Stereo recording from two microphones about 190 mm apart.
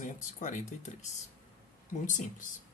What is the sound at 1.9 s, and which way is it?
Speech, 40° left (ahead or behind).